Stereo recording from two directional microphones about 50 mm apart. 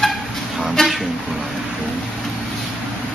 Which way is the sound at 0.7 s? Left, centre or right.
Centre.